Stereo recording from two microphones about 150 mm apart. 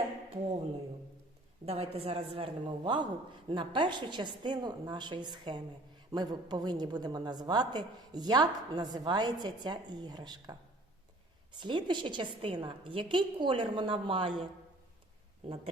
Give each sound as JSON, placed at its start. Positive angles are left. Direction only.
{"t": 1.6, "sound": "a woman's voice", "side_deg": -40}
{"t": 11.5, "sound": "a woman's voice", "side_deg": -30}
{"t": 15.4, "sound": "speech", "side_deg": -40}